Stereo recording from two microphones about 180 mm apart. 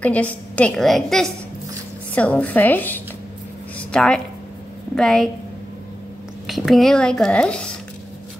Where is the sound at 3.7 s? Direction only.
5° left (ahead or behind).